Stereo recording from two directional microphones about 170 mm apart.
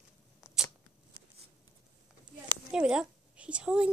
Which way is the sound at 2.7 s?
5° right (ahead or behind).